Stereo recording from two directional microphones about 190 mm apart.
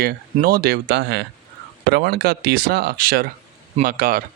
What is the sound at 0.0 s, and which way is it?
Speech, 55° right (ahead or behind).